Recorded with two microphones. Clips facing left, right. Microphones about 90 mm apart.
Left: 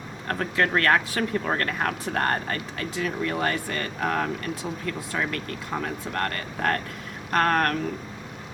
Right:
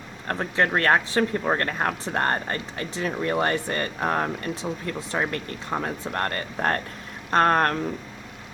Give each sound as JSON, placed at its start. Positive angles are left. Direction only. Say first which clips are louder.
{"t": 0.3, "sound": "speech", "louder": "right 1 dB", "side_deg": -25}